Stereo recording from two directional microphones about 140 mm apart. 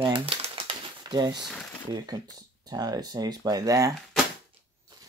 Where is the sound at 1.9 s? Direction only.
30° right (ahead or behind).